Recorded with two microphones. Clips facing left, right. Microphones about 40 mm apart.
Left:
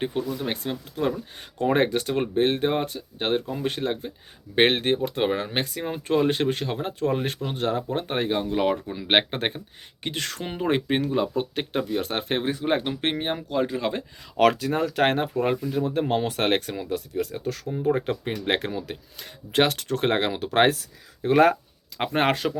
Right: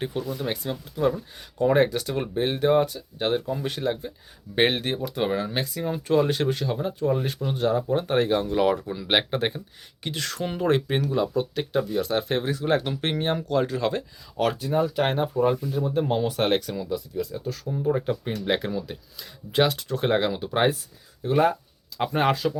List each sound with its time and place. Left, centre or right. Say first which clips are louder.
0.7 s speech: right 3 dB; left
5.8 s speech: right 1 dB; left
7.9 s speech: right 3 dB; left
10.4 s speech: right 2 dB; centre
14.3 s speech: left 3 dB; left
16.9 s speech: left 2 dB; left
17.7 s speech: left 1 dB; left
17.9 s speech: even; left
21.9 s speech: even; left